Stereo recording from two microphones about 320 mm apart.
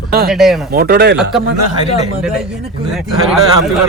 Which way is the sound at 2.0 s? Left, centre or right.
Centre.